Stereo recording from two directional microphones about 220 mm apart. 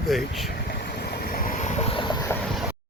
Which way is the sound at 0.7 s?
45° left (ahead or behind).